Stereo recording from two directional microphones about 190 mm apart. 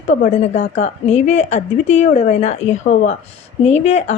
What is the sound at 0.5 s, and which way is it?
A woman's voice, 35° left (ahead or behind).